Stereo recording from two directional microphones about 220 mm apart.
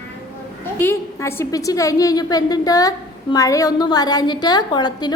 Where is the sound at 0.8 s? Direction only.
10° left (ahead or behind).